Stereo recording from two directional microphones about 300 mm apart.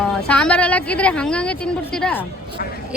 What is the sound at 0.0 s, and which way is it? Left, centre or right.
A woman's voice, centre.